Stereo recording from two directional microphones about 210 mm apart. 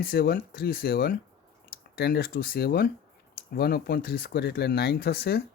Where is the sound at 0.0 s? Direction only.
45° left (ahead or behind).